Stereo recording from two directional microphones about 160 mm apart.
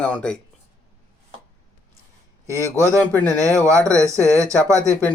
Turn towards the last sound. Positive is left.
turn(degrees=-20)  # may be behind; listen again after turning